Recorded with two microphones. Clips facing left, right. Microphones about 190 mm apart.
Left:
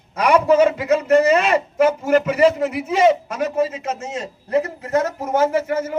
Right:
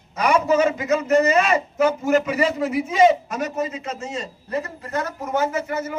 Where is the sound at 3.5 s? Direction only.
50° left (ahead or behind); by 5.4 s 70° left (ahead or behind).